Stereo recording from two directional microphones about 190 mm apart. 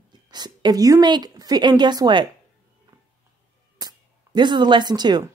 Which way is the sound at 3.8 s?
20° right (ahead or behind).